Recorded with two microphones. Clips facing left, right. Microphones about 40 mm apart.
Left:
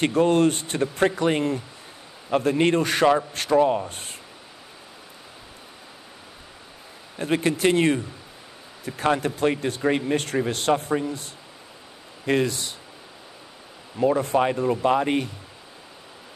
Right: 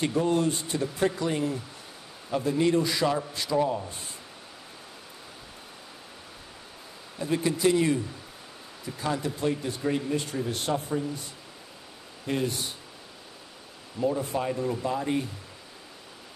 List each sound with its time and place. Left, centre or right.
0.0 s speech: left
7.2 s speech: left
12.3 s speech: left
13.9 s speech: left
14.6 s speech: left
14.9 s speech: left